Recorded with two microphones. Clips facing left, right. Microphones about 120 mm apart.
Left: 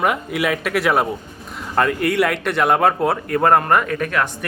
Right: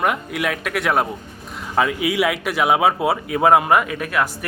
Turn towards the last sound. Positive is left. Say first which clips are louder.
# left 1 dB
turn(degrees=-5)  # may be behind; listen again after turning